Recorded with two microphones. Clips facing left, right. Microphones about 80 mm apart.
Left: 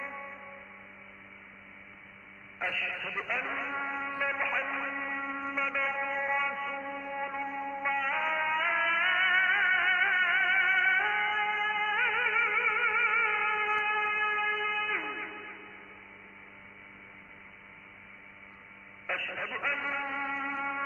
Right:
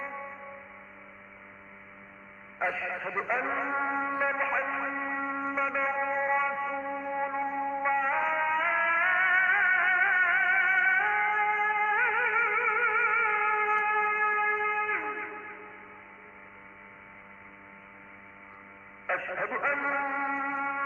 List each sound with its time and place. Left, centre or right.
0.0 s music: centre
2.6 s a man's voice: right
3.2 s a man's voice: centre
4.3 s a sound: centre
9.3 s music: centre
19.0 s a sound: right
20.2 s music: centre